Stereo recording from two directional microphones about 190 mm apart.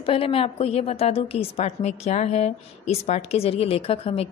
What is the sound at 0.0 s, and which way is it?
A woman's voice, 30° left (ahead or behind).